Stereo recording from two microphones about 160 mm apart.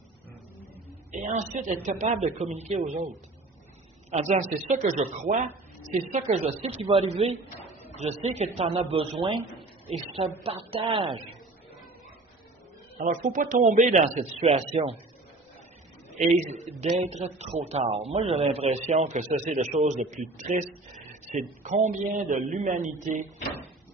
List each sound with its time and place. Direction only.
1.1 s a man's voice: 50° right (ahead or behind); by 11.1 s 30° right (ahead or behind)
13.1 s a man's voice: 60° right (ahead or behind); by 15.0 s 40° right (ahead or behind)
16.1 s a man's voice: 45° right (ahead or behind)